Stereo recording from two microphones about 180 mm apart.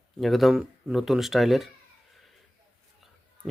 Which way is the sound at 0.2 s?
Centre (ahead or behind).